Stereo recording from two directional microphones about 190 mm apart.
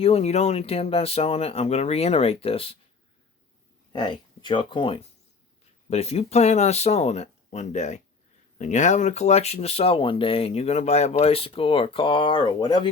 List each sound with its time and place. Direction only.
0.0 s speech: 35° left (ahead or behind)
3.9 s speech: 25° left (ahead or behind)